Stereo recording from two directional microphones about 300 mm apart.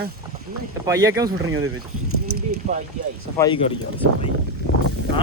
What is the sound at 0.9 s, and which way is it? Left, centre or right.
Speech, centre.